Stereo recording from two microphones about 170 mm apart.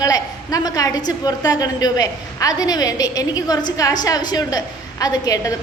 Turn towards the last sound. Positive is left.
turn(degrees=20)  # may be behind; listen again after turning